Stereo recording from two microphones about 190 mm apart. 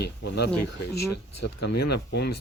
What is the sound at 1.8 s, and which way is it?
Speech, 60° left (ahead or behind).